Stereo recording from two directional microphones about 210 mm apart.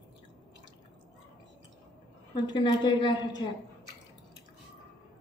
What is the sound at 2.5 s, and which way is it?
A woman's voice, 20° left (ahead or behind).